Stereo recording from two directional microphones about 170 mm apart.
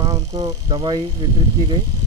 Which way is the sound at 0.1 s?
20° right (ahead or behind).